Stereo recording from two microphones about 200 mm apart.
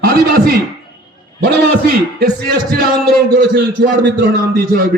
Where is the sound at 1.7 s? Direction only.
50° right (ahead or behind).